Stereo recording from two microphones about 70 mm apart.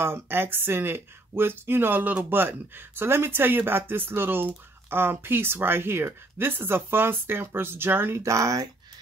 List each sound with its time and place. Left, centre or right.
0.0 s speech: right
8.2 s speech: right